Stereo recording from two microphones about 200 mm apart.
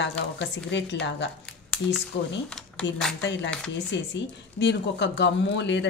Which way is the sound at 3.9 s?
65° left (ahead or behind).